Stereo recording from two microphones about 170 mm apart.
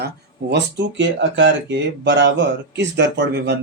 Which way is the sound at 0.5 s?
90° right.